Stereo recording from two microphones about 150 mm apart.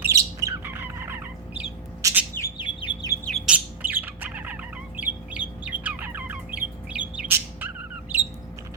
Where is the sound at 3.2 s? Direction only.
Centre (ahead or behind).